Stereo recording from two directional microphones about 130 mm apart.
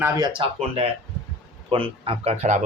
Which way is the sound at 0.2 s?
45° right (ahead or behind).